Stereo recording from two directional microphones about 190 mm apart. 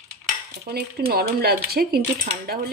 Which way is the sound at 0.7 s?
55° right (ahead or behind).